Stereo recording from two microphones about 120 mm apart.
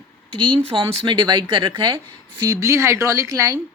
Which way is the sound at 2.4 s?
30° right (ahead or behind).